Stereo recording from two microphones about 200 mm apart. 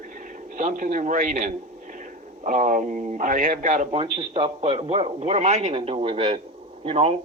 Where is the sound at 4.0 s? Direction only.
25° right (ahead or behind).